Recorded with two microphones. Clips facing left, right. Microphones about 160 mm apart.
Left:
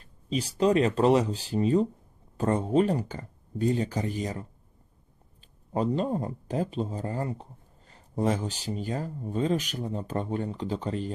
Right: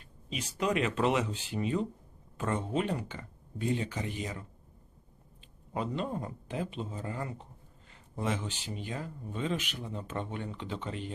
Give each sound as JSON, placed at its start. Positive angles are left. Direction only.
{"t": 0.0, "sound": "speech", "side_deg": 35}
{"t": 5.7, "sound": "speech", "side_deg": 35}